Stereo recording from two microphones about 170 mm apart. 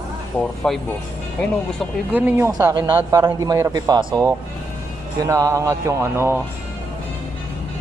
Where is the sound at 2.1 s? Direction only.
10° right (ahead or behind).